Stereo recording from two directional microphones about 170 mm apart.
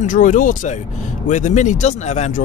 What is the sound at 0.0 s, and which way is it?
Speech, 50° left (ahead or behind).